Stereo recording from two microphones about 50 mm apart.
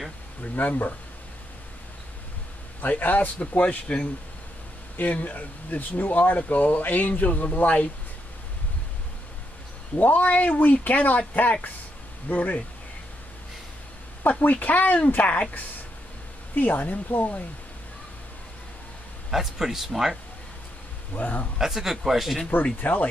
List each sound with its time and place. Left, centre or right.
0.4 s speech: left
2.8 s speech: left
3.3 s speech: left
4.9 s speech: left
9.9 s speech: left
14.4 s speech: left
16.5 s speech: left
19.3 s speech: centre
21.1 s speech: left
21.5 s speech: centre
22.8 s speech: left